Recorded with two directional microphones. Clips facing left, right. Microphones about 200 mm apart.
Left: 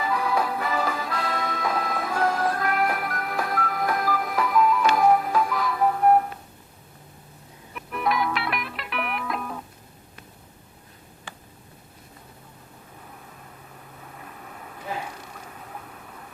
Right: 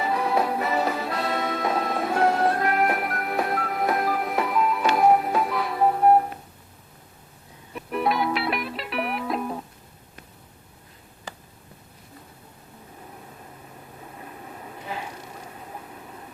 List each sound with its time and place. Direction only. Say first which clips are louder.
0.0 s music: right 1 dB; 25° right (ahead or behind)
7.8 s music: right 2 dB; 30° right (ahead or behind)